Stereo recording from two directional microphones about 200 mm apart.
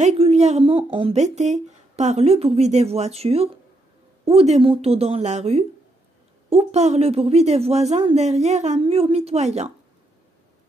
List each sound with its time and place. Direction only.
0.0 s a woman's voice: 30° right (ahead or behind)